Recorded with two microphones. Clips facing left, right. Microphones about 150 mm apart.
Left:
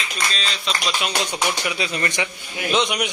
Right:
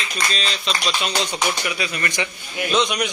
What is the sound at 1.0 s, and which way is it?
A man's voice, 15° left (ahead or behind).